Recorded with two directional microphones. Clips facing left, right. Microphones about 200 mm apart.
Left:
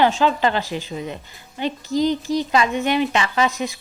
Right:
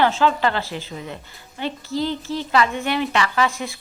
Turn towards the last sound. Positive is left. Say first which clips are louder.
# left 1 dB
turn(degrees=20)  # may be behind; listen again after turning